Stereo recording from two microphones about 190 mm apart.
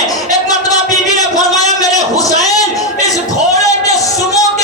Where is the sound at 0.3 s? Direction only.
20° left (ahead or behind).